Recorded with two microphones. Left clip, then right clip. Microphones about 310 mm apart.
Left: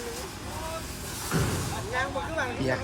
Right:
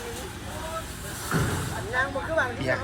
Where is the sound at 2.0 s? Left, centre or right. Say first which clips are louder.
Right 5 dB; centre.